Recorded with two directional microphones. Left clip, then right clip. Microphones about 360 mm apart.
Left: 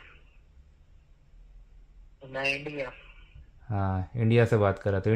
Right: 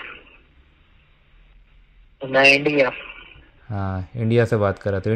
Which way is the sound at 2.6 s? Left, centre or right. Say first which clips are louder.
Right 17 dB; right.